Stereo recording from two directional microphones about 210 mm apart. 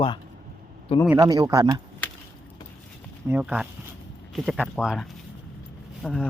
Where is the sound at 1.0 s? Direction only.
15° right (ahead or behind).